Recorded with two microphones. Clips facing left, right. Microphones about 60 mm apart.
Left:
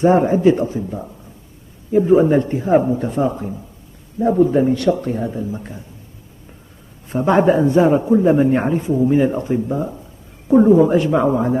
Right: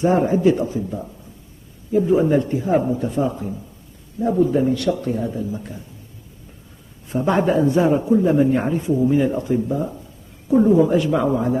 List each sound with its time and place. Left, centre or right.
0.0 s a man's voice: left
7.1 s a man's voice: left